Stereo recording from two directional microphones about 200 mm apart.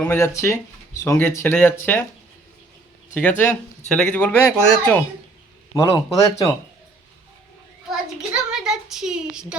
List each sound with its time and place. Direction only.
0.0 s speech: 15° left (ahead or behind)
3.2 s speech: 10° left (ahead or behind)
5.7 s speech: 15° left (ahead or behind)
7.9 s a sound: 5° right (ahead or behind)